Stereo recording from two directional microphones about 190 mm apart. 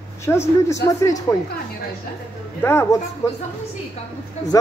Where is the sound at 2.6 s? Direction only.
15° left (ahead or behind).